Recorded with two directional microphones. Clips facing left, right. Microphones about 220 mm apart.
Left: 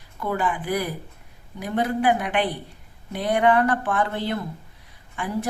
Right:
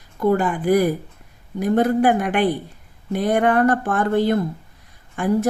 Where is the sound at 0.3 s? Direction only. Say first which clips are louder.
Right 8 dB; 45° right (ahead or behind).